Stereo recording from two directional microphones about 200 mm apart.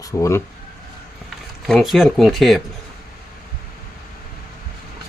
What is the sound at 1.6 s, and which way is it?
Speech, centre (ahead or behind).